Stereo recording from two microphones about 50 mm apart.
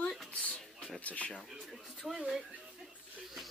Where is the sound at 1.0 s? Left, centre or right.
Left.